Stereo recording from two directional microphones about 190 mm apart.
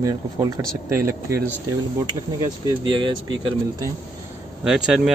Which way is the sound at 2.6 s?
25° right (ahead or behind).